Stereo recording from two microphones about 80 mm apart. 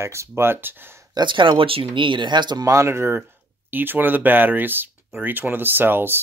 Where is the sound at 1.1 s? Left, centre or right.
Right.